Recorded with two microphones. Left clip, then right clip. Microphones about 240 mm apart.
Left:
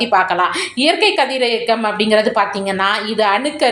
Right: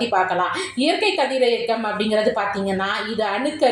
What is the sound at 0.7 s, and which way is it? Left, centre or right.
A woman's voice, left.